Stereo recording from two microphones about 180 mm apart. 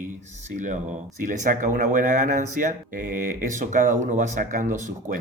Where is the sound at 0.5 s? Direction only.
45° right (ahead or behind).